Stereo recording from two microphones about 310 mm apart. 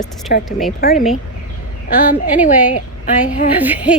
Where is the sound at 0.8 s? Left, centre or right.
Left.